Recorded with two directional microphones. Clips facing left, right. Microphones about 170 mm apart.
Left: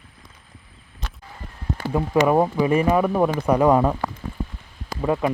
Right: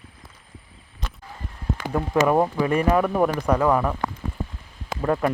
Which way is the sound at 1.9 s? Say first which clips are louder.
Left 2 dB; 5° left (ahead or behind).